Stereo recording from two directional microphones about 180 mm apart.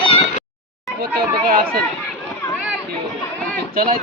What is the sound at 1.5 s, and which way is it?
Speech, 55° right (ahead or behind).